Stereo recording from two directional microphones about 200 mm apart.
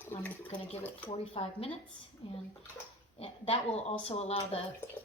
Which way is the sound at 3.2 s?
30° left (ahead or behind).